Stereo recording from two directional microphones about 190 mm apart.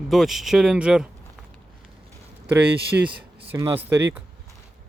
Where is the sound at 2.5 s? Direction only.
5° right (ahead or behind).